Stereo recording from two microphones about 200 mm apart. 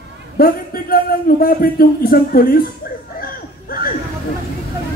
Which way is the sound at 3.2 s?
50° left (ahead or behind).